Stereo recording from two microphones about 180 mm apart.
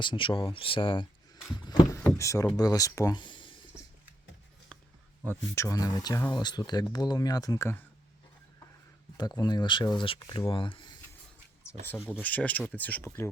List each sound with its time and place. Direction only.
0.0 s speech: 25° left (ahead or behind)
1.5 s a sound: 25° left (ahead or behind)
2.1 s speech: 15° left (ahead or behind)
4.7 s a sound: 5° left (ahead or behind)
5.2 s speech: 15° left (ahead or behind)
9.1 s speech: 20° left (ahead or behind)
12.0 s speech: 10° left (ahead or behind)